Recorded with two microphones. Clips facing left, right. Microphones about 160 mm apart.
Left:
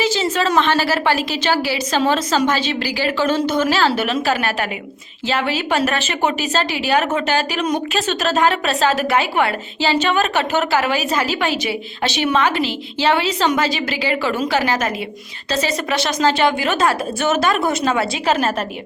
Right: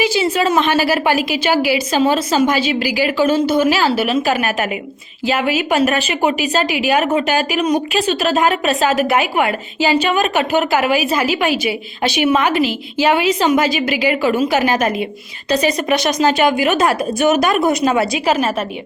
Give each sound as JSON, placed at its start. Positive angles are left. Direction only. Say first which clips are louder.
{"t": 0.0, "sound": "a woman's voice", "louder": "right 3 dB", "side_deg": -10}